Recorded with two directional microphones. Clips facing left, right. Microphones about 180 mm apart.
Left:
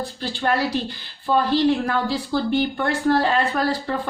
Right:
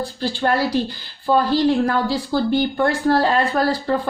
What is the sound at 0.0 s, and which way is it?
A woman's voice, 35° right (ahead or behind).